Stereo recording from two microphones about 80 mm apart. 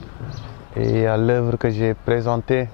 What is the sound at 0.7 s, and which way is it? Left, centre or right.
Speech, centre.